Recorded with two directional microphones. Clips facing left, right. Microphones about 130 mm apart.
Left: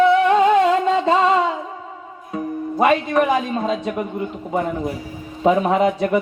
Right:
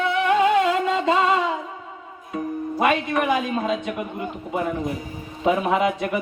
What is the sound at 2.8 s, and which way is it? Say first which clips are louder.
Speech: left 5 dB; 35° left (ahead or behind).